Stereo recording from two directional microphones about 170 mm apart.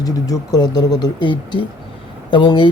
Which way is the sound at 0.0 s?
20° left (ahead or behind).